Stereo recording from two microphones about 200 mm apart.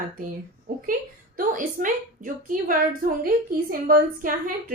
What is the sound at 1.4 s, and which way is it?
A woman's voice, 40° right (ahead or behind).